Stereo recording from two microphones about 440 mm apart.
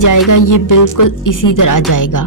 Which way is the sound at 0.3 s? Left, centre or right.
Left.